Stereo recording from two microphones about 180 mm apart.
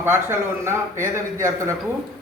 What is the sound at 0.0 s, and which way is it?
Speech, 15° right (ahead or behind).